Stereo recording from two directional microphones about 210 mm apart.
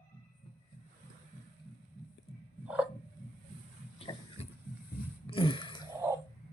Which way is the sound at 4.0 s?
30° left (ahead or behind).